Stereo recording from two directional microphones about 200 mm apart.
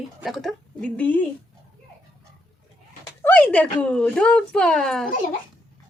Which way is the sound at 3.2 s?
10° left (ahead or behind).